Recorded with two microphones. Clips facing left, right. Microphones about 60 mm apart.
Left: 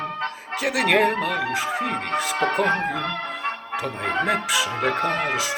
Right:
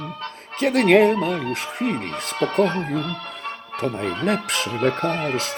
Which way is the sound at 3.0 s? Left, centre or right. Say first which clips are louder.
Left 2 dB; left.